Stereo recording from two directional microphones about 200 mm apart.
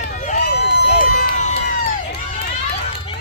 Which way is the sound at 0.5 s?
55° left (ahead or behind).